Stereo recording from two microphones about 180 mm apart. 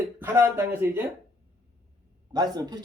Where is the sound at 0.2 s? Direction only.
15° right (ahead or behind).